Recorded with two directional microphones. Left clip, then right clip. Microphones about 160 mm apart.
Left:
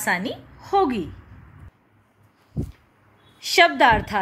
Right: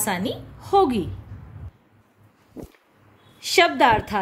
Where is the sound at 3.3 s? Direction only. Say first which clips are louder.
Left 1 dB; 5° left (ahead or behind).